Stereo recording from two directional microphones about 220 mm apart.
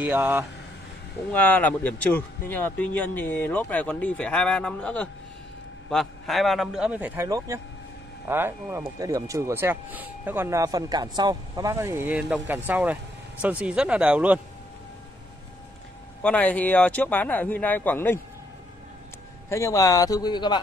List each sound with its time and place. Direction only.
0.0 s speech: 10° right (ahead or behind)
1.3 s a man's voice: 5° left (ahead or behind)
16.2 s speech: 5° left (ahead or behind)
19.5 s speech: 15° left (ahead or behind)